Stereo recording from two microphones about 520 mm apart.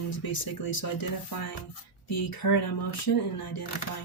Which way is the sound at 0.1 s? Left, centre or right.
Left.